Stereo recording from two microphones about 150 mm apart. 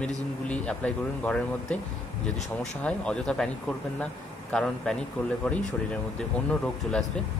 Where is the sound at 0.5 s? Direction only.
10° left (ahead or behind).